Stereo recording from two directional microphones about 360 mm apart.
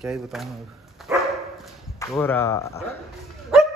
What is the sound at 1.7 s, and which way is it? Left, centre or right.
Speech, centre.